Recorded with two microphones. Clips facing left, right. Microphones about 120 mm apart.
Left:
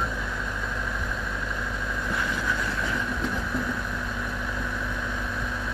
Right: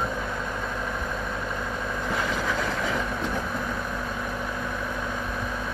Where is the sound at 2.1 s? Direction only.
90° right.